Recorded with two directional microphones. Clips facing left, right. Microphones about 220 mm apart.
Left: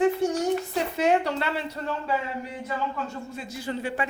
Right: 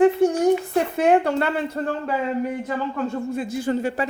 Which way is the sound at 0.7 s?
55° right (ahead or behind).